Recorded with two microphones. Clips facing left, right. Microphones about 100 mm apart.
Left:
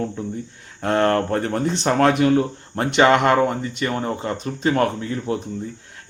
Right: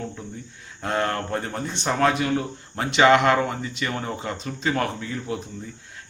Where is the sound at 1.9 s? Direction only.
55° left (ahead or behind); by 5.4 s 35° left (ahead or behind).